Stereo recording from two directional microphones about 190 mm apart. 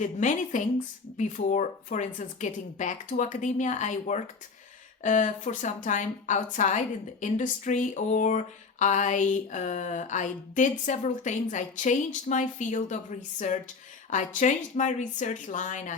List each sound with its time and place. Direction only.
0.0 s a woman's voice: 40° left (ahead or behind)